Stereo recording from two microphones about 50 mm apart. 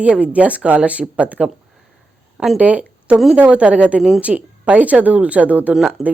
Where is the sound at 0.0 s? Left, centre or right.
Right.